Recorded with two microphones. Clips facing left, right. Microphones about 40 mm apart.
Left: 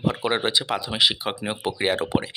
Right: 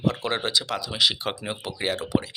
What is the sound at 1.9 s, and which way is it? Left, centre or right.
Speech, left.